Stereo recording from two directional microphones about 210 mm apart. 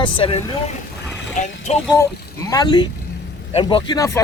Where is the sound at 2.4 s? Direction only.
20° left (ahead or behind).